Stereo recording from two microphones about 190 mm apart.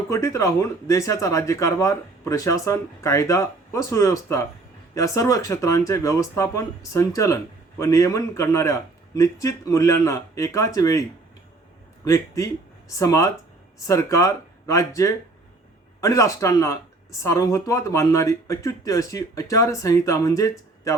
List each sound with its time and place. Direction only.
0.1 s speech: 15° left (ahead or behind)
12.0 s speech: 15° left (ahead or behind)